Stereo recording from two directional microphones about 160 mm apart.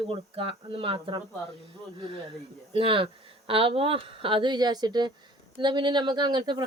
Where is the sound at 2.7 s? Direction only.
35° right (ahead or behind).